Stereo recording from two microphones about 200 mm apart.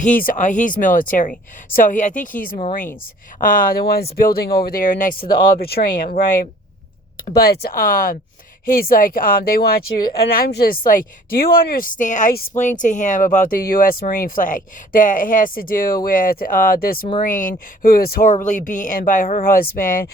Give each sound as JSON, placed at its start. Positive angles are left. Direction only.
{"t": 0.0, "sound": "speech", "side_deg": 45}